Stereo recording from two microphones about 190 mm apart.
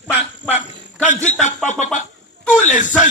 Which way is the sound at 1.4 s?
40° left (ahead or behind).